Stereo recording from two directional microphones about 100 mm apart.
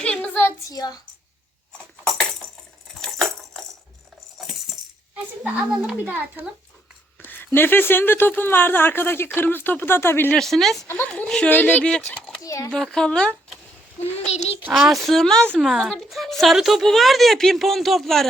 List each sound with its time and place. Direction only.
0.0 s a sound: 15° left (ahead or behind)
0.7 s speech: 40° left (ahead or behind)
3.0 s a sound: centre (ahead or behind)
4.4 s coin: centre (ahead or behind)
5.4 s speech: 10° right (ahead or behind)
6.1 s speech: 20° right (ahead or behind)
7.2 s speech: 20° left (ahead or behind)
10.3 s speech: 5° left (ahead or behind)
10.8 s speech: 25° left (ahead or behind)
11.1 s speech: 10° left (ahead or behind)
12.4 s speech: 35° left (ahead or behind)
12.7 s speech: 5° left (ahead or behind)
14.7 s speech: centre (ahead or behind)